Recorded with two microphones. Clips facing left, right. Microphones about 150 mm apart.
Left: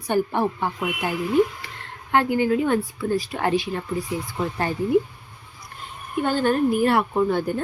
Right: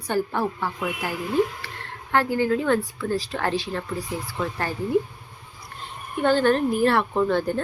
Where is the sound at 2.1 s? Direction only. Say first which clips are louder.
Left 2 dB; 15° left (ahead or behind).